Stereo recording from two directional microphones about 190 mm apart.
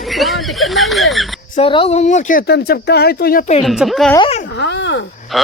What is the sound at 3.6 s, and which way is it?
Speech, centre (ahead or behind).